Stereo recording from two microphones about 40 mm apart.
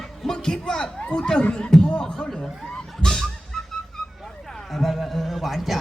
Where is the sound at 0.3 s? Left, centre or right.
Centre.